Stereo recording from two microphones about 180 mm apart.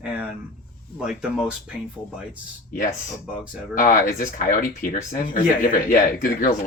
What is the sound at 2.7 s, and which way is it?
Speech, 50° left (ahead or behind).